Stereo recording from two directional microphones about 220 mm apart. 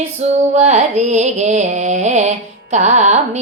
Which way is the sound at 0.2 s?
30° right (ahead or behind).